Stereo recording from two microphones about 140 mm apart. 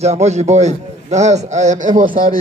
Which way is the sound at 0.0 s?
50° right (ahead or behind).